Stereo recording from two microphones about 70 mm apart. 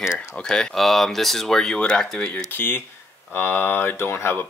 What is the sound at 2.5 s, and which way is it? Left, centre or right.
Speech, left.